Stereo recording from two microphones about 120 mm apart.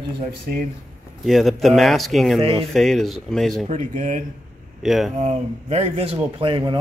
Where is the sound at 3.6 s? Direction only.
90° right.